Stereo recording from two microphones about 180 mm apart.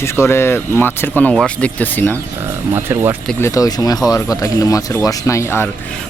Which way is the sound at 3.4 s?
20° left (ahead or behind).